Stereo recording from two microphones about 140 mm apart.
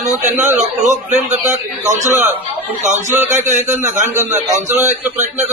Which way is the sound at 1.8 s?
55° right (ahead or behind).